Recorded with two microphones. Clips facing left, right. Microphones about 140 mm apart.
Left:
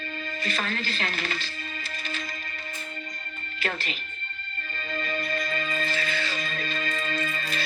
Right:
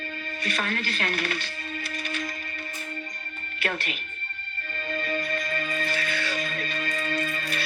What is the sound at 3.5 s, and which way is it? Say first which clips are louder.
Speech: right 1 dB; 55° right (ahead or behind).